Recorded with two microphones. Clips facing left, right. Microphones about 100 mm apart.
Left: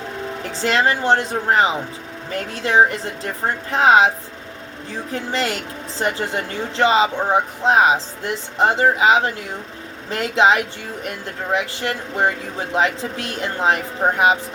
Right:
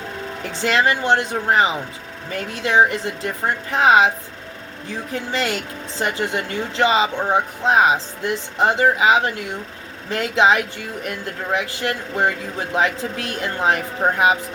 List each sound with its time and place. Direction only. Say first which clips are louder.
0.5 s speech: even; 35° left (ahead or behind)